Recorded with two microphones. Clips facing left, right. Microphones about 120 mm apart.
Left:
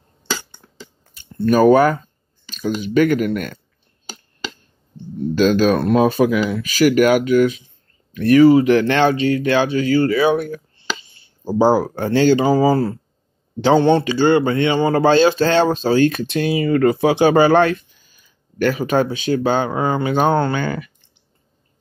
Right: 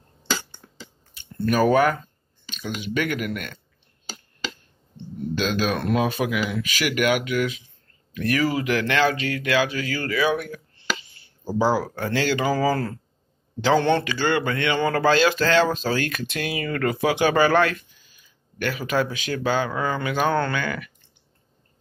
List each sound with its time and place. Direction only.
1.4 s speech: 35° left (ahead or behind)
5.3 s speech: 40° left (ahead or behind); by 17.7 s 25° left (ahead or behind)
18.1 s a sound: 40° left (ahead or behind)
19.3 s speech: 30° left (ahead or behind)